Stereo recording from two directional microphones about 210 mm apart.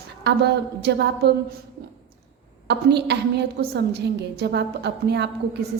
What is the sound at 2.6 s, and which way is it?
A woman's voice, 55° right (ahead or behind).